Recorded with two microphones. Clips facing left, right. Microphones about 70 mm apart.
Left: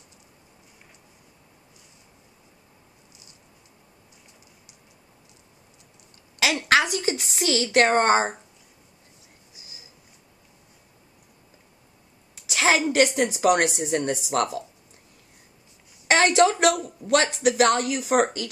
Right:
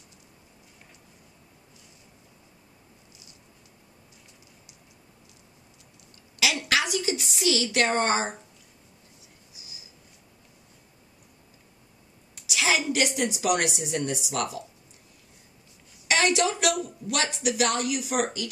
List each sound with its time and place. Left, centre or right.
6.7 s a woman's voice: left
12.4 s a woman's voice: left
16.1 s a sound: left
16.8 s a woman's voice: left